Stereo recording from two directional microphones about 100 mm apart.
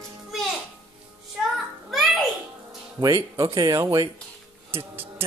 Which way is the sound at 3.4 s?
50° right (ahead or behind).